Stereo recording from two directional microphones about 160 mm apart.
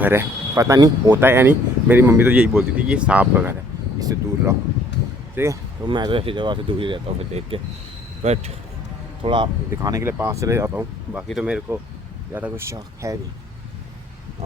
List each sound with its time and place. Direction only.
0.0 s speech: 15° right (ahead or behind)
4.9 s a sound: 90° left
5.3 s speech: 15° right (ahead or behind)
5.8 s speech: 30° right (ahead or behind)
9.2 s speech: 30° right (ahead or behind)
9.7 s speech: 20° right (ahead or behind)